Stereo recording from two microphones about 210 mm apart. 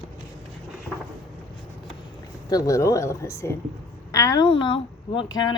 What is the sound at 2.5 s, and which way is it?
Speech, 15° left (ahead or behind).